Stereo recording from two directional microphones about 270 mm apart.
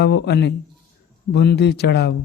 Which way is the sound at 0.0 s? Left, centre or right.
Left.